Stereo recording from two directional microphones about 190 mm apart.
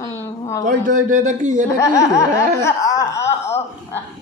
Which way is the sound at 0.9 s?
45° right (ahead or behind).